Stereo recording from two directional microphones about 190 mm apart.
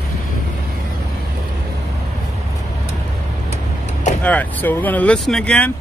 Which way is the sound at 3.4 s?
35° left (ahead or behind).